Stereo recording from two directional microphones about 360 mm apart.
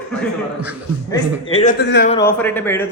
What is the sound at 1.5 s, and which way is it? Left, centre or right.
Speech, left.